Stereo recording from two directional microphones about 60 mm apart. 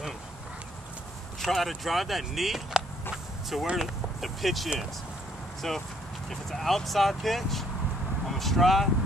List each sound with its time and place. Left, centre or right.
1.4 s speech: centre